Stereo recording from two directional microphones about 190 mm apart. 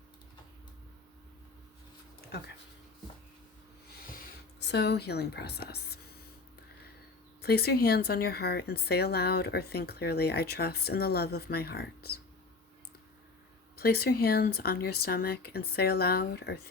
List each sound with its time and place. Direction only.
4.6 s speech: 60° left (ahead or behind)
7.4 s speech: 55° left (ahead or behind)
13.7 s speech: 55° left (ahead or behind)